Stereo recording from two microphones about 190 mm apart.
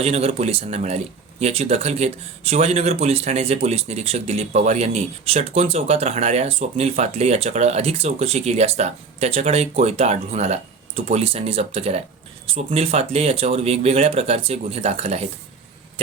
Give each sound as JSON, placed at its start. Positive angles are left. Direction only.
{"t": 0.0, "sound": "speech", "side_deg": -35}